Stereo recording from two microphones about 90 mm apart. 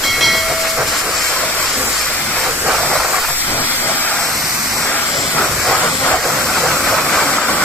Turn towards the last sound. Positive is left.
turn(degrees=10)  # may be behind; listen again after turning